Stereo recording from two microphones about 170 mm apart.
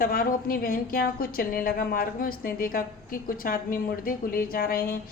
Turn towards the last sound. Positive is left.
turn(degrees=60)  # may be behind; listen again after turning